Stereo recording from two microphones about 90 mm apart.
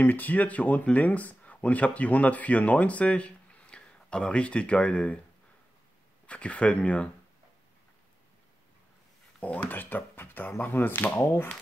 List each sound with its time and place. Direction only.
0.0 s speech: 20° left (ahead or behind)
6.2 s speech: 15° left (ahead or behind)
9.4 s speech: 15° left (ahead or behind)